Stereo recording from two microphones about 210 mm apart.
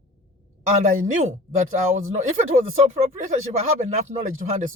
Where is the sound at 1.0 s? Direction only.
35° right (ahead or behind).